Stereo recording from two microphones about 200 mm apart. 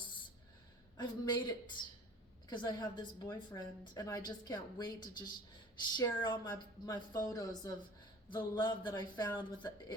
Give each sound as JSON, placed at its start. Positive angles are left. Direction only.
{"t": 0.9, "sound": "a woman's voice", "side_deg": 20}